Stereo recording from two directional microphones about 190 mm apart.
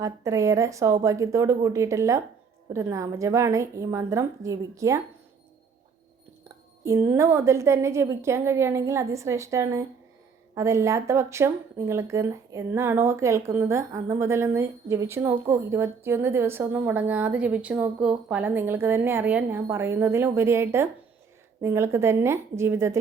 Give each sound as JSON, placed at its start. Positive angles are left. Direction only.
{"t": 0.0, "sound": "speech", "side_deg": -15}
{"t": 6.8, "sound": "speech", "side_deg": -15}